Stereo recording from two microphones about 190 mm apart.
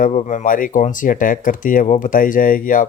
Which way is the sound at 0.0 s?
40° left (ahead or behind).